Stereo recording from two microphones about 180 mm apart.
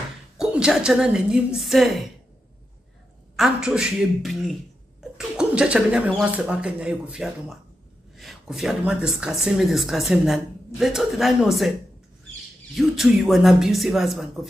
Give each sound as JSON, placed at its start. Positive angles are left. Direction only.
{"t": 0.4, "sound": "speech", "side_deg": -5}
{"t": 3.3, "sound": "speech", "side_deg": -5}
{"t": 12.7, "sound": "speech", "side_deg": 0}